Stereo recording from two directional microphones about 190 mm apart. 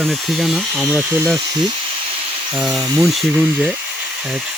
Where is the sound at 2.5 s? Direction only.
Centre (ahead or behind).